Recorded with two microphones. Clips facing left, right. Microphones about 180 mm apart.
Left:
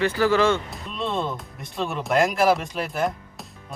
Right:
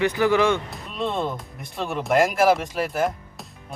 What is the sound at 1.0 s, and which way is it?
Speech, centre (ahead or behind).